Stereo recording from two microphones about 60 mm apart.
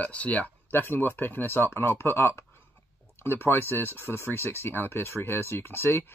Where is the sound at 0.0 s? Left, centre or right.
Left.